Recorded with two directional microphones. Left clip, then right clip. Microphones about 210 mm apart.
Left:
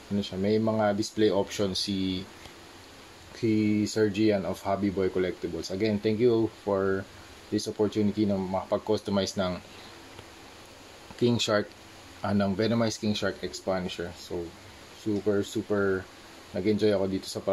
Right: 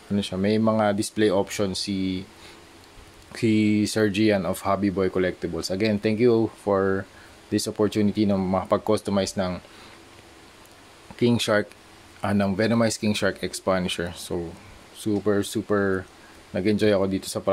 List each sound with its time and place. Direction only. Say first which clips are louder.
0.2 s speech: right 3 dB; 40° right (ahead or behind)
3.3 s speech: right 4 dB; 45° right (ahead or behind)
11.1 s speech: right 4 dB; 30° right (ahead or behind)